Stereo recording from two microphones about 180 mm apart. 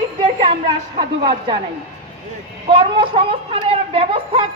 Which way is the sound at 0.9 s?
25° right (ahead or behind).